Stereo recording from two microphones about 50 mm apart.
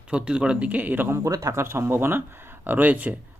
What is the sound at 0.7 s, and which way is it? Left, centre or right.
Speech, right.